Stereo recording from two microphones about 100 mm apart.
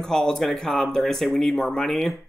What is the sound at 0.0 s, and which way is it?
Speech, 5° left (ahead or behind).